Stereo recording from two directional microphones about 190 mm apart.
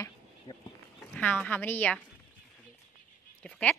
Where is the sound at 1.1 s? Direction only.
5° left (ahead or behind).